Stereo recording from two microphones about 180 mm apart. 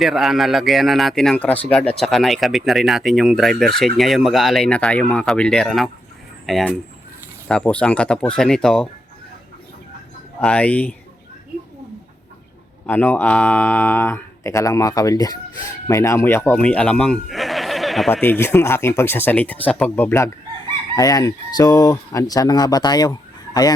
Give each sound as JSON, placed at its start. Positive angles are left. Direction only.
{"t": 0.0, "sound": "speech", "side_deg": 0}
{"t": 10.4, "sound": "speech", "side_deg": 5}
{"t": 12.8, "sound": "speech", "side_deg": 10}
{"t": 18.1, "sound": "speech", "side_deg": 10}
{"t": 20.9, "sound": "chicken", "side_deg": 20}